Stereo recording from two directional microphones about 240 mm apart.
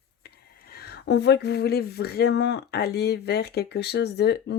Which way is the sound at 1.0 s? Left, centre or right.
Left.